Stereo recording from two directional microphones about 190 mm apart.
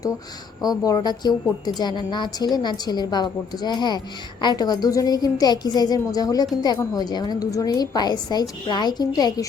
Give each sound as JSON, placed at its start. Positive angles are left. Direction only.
{"t": 0.6, "sound": "a woman's voice", "side_deg": 20}